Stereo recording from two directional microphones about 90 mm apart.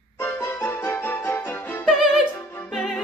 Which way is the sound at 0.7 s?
20° left (ahead or behind).